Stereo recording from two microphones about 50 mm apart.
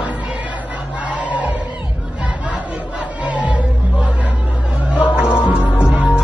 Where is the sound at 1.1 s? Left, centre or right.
Right.